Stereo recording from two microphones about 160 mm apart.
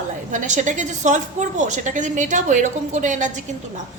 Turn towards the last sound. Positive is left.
turn(degrees=-50)  # may be behind; listen again after turning